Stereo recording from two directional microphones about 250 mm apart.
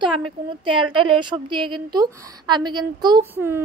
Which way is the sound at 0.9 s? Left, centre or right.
Centre.